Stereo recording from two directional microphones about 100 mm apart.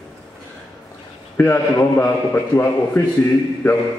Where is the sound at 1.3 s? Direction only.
20° left (ahead or behind).